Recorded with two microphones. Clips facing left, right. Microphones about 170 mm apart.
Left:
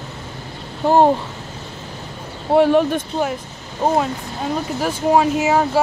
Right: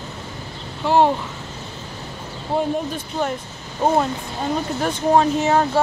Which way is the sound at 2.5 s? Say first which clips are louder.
Left 8 dB; 75° left (ahead or behind).